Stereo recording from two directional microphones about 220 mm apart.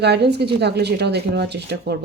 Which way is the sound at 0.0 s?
50° right (ahead or behind).